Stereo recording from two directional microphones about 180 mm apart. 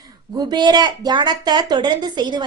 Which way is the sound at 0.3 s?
25° right (ahead or behind).